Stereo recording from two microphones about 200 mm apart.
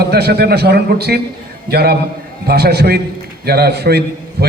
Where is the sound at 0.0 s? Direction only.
50° right (ahead or behind).